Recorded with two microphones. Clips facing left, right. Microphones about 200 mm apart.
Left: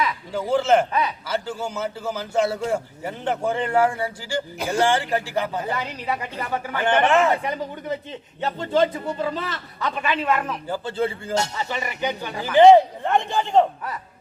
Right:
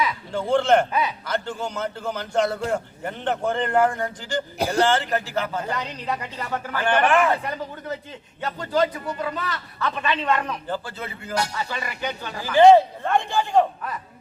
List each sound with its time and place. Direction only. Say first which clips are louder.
0.0 s a man's voice: even; 5° left (ahead or behind)
4.5 s speech: right 3 dB; 35° right (ahead or behind)
4.8 s a man's voice: left 1 dB; 10° left (ahead or behind)
6.8 s speech: left 1 dB; 20° left (ahead or behind)
9.8 s a man's voice: left 1 dB; 10° left (ahead or behind)
10.8 s speech: left 9 dB; 30° left (ahead or behind)